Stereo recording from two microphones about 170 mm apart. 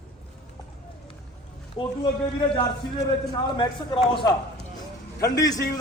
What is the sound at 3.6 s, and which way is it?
A man's voice, 30° left (ahead or behind).